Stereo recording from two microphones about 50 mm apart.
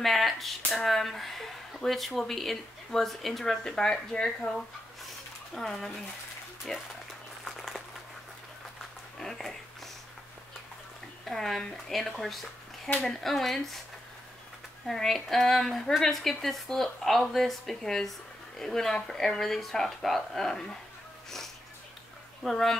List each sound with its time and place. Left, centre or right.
0.0 s speech: centre
5.5 s speech: centre
7.4 s applause: centre
9.2 s speech: centre
11.2 s speech: centre
14.9 s speech: centre
22.4 s speech: centre